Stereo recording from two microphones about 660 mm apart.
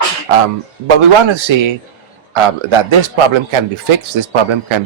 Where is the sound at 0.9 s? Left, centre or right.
Right.